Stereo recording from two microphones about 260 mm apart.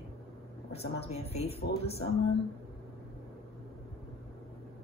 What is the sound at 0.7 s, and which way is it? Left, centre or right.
Speech, left.